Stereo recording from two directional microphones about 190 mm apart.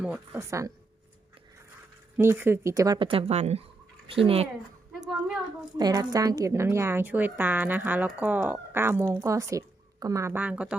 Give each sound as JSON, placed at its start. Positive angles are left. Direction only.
{"t": 0.0, "sound": "a woman's voice", "side_deg": -10}
{"t": 2.1, "sound": "speech", "side_deg": -15}
{"t": 5.7, "sound": "a woman's voice", "side_deg": -20}